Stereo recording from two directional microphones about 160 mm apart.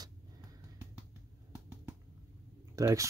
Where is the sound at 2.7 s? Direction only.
20° right (ahead or behind).